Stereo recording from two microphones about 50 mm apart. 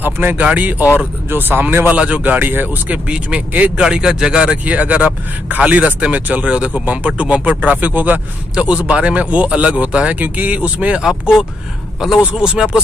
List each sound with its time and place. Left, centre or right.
0.0 s speech: right
0.4 s speech: right
0.9 s speech: right
1.9 s speech: right
2.2 s speech: right
2.9 s speech: right
3.7 s speech: centre
4.6 s speech: right
11.0 s speech: centre
12.4 s speech: centre